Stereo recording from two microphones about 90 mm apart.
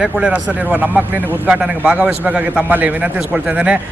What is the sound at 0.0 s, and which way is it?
A man's voice, 15° right (ahead or behind).